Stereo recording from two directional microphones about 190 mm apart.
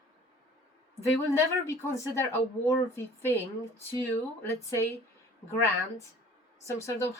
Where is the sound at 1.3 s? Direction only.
15° left (ahead or behind).